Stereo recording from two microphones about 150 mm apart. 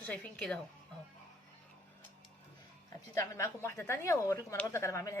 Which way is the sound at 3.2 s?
20° left (ahead or behind).